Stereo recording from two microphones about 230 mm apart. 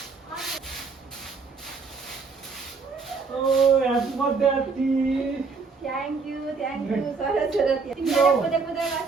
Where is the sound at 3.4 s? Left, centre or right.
Centre.